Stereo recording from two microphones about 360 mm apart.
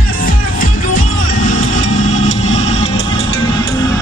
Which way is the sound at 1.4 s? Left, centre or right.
Centre.